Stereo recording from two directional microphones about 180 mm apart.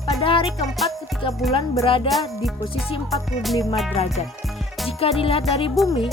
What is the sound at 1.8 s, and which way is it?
Music, 30° left (ahead or behind).